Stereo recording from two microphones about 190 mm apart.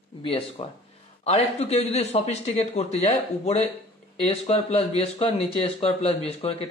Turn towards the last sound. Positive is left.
turn(degrees=30)  # may be behind; listen again after turning